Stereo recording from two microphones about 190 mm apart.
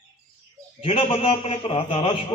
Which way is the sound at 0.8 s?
30° left (ahead or behind).